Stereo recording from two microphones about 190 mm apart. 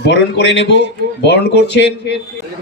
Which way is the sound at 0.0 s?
65° left (ahead or behind).